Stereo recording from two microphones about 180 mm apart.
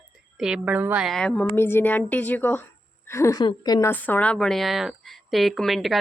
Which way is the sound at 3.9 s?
10° left (ahead or behind).